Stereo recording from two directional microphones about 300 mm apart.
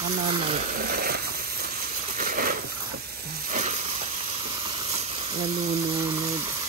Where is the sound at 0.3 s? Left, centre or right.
Right.